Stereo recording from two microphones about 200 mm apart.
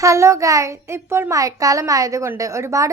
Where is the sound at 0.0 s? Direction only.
15° right (ahead or behind).